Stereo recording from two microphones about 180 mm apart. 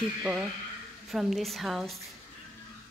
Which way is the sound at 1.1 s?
Centre (ahead or behind).